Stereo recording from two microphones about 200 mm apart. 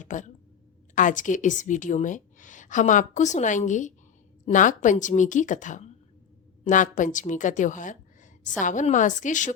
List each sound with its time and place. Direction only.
0.0 s a woman's voice: 40° left (ahead or behind)